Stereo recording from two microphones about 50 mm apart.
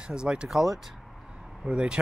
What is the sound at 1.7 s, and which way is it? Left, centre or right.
Speech, centre.